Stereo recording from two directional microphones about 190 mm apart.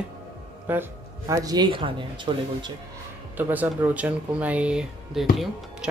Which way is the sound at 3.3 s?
10° right (ahead or behind).